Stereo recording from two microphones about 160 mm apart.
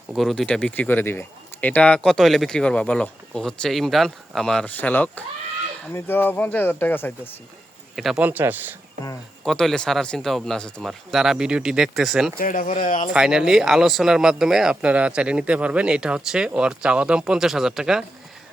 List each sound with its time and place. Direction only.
0.1 s speech: centre (ahead or behind)
7.9 s speech: centre (ahead or behind)
9.4 s speech: centre (ahead or behind)
12.4 s speech: 55° left (ahead or behind)
13.1 s speech: 5° right (ahead or behind)